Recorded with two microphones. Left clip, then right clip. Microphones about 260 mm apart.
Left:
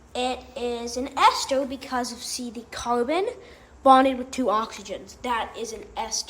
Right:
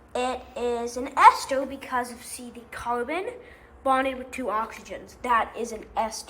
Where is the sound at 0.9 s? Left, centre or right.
Centre.